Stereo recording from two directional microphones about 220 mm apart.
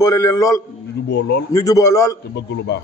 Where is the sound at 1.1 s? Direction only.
50° left (ahead or behind).